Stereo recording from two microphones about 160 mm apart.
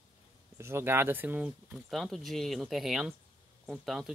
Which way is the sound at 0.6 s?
15° right (ahead or behind).